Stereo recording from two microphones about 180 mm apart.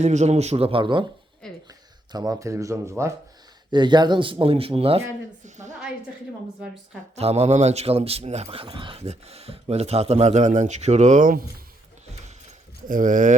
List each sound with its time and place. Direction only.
0.0 s a man's voice: 40° right (ahead or behind)
1.4 s a sound: 5° left (ahead or behind)
2.1 s speech: 20° right (ahead or behind)
7.2 s a man's voice: 35° right (ahead or behind); by 11.6 s 50° right (ahead or behind)
12.9 s speech: 45° right (ahead or behind)